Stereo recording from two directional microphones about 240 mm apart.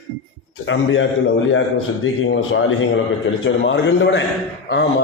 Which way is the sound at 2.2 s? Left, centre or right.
Left.